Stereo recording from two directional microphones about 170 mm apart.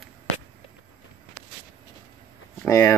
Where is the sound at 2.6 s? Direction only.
15° left (ahead or behind).